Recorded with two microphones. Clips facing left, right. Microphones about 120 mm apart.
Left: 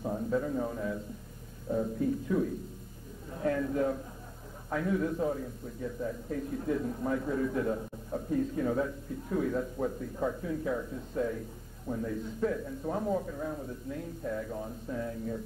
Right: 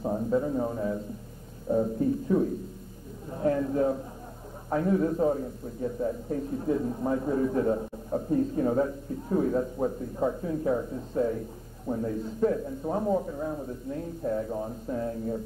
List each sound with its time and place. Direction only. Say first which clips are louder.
0.0 s a man's voice: right 4 dB; 25° right (ahead or behind)